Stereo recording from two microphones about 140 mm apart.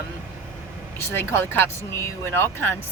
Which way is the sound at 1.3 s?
15° left (ahead or behind).